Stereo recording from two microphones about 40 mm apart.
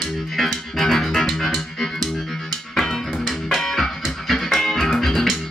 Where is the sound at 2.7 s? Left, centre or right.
Centre.